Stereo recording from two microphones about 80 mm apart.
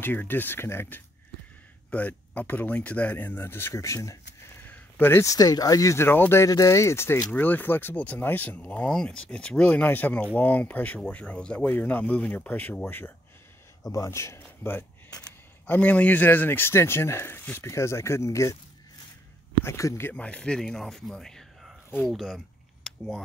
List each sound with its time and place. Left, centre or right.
0.0 s speech: left
4.6 s a sound: left
5.2 s speech: left
5.9 s speech: left
6.4 s speech: left
7.3 s speech: left
13.8 s speech: left
19.6 s speech: left
20.2 s speech: centre
22.8 s a sound: centre